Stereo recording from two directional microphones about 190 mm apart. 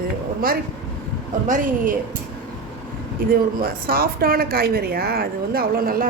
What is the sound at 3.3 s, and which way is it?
A woman's voice, 50° right (ahead or behind).